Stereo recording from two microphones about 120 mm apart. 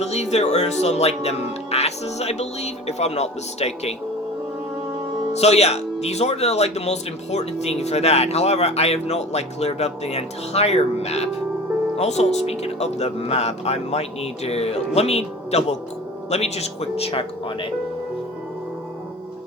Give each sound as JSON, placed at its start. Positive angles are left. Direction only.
{"t": 0.0, "sound": "speech", "side_deg": 65}
{"t": 5.3, "sound": "speech", "side_deg": 65}